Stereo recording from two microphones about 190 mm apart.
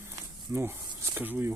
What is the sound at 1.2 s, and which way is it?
Speech, 10° right (ahead or behind).